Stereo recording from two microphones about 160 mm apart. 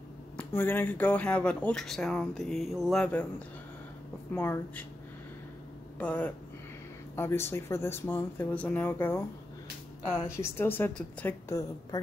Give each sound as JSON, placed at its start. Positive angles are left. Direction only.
{"t": 0.4, "sound": "speech", "side_deg": 10}
{"t": 5.9, "sound": "speech", "side_deg": 10}
{"t": 10.2, "sound": "speech", "side_deg": 15}